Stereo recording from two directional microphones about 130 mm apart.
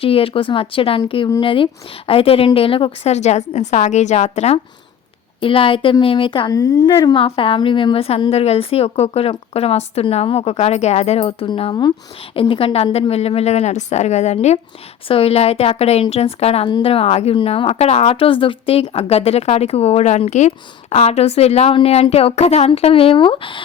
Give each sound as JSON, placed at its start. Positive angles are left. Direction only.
{"t": 0.0, "sound": "a woman's voice", "side_deg": 45}
{"t": 5.4, "sound": "a woman's voice", "side_deg": 45}
{"t": 6.5, "sound": "a woman's voice", "side_deg": 25}
{"t": 15.0, "sound": "speech", "side_deg": 45}